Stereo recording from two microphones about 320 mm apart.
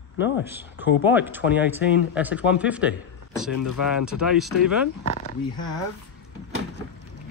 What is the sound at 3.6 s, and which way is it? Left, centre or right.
Speech, left.